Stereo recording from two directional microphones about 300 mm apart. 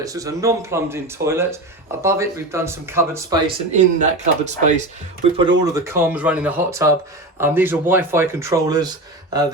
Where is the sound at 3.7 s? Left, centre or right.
Right.